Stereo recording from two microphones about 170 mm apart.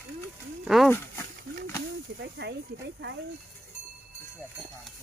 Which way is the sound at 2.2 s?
80° right.